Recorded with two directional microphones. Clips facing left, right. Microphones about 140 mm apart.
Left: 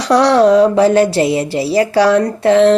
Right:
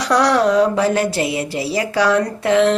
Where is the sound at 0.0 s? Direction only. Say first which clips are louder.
Left 5 dB; 25° left (ahead or behind).